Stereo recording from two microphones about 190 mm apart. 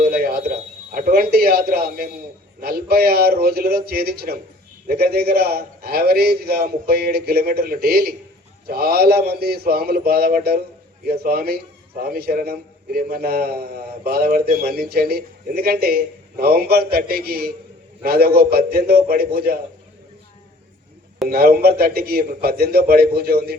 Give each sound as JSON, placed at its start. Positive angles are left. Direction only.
{"t": 0.0, "sound": "a sound", "side_deg": -55}
{"t": 2.6, "sound": "a man's voice", "side_deg": -55}
{"t": 21.2, "sound": "a man's voice", "side_deg": -55}